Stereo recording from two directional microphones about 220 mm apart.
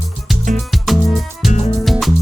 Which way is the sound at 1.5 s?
30° left (ahead or behind).